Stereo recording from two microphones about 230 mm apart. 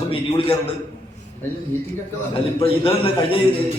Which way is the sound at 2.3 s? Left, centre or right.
Left.